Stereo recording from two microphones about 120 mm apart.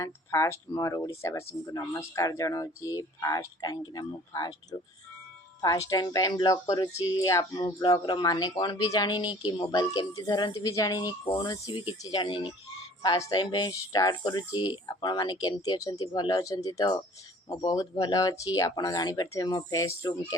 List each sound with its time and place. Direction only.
0.0 s speech: 25° left (ahead or behind); by 12.5 s 45° left (ahead or behind)
13.1 s speech: 30° left (ahead or behind)